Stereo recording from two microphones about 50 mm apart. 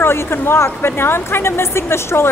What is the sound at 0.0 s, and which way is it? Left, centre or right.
Speech, left.